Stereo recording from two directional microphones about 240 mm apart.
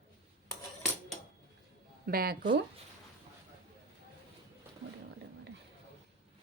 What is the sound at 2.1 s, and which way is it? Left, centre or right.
Speech, right.